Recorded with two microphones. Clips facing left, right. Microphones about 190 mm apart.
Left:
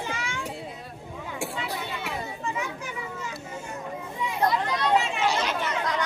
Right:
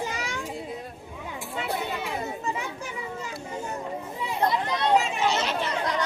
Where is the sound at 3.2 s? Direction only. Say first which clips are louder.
Right 2 dB; 35° right (ahead or behind).